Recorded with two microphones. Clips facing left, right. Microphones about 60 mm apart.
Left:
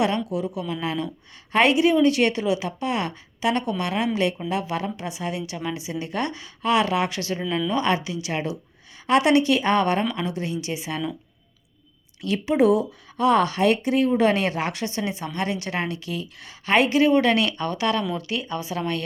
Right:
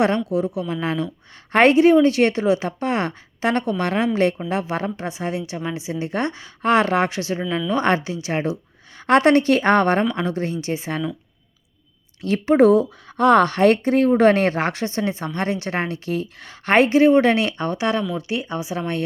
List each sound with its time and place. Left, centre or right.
0.3 s speech: right
7.2 s speech: right
7.7 s speech: right
9.0 s speech: right
12.2 s speech: right